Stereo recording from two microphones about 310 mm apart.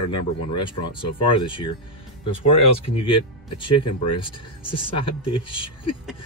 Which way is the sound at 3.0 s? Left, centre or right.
Centre.